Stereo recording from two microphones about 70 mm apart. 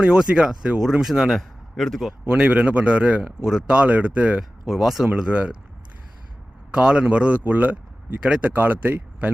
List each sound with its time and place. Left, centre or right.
0.0 s a man's voice: centre
1.4 s a man's voice: centre
2.3 s a man's voice: centre
4.4 s speech: centre
5.0 s a man's voice: centre
6.7 s speech: centre